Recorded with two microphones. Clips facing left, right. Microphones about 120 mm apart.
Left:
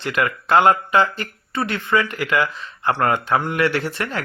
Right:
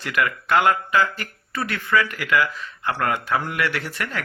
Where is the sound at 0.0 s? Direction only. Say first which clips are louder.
Left 2 dB; 30° left (ahead or behind).